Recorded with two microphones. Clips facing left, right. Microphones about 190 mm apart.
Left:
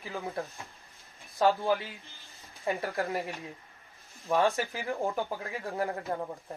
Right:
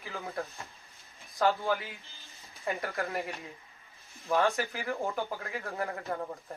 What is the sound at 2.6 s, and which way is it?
Speech, 30° left (ahead or behind).